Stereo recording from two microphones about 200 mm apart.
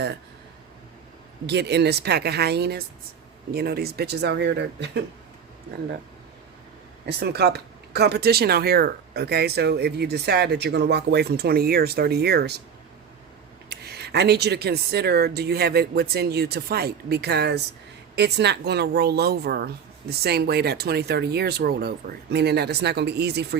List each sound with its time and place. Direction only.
1.5 s speech: 55° right (ahead or behind)
7.0 s speech: 55° right (ahead or behind)
13.7 s speech: 55° right (ahead or behind)